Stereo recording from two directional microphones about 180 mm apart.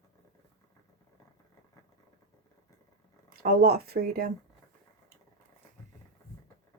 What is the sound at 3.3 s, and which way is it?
Speech, 60° right (ahead or behind).